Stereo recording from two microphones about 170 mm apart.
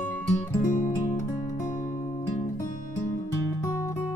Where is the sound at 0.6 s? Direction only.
50° left (ahead or behind).